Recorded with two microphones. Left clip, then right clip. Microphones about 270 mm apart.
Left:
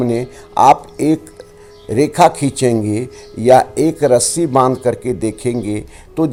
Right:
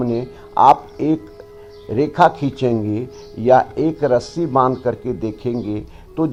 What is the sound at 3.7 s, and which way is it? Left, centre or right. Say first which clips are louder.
Speech: left 4 dB; left.